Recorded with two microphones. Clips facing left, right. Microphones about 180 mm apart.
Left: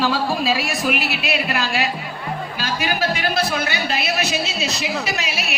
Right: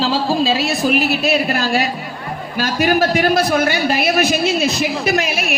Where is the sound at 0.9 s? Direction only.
45° right (ahead or behind).